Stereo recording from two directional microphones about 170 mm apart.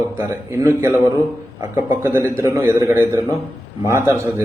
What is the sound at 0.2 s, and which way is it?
A man's voice, 15° right (ahead or behind).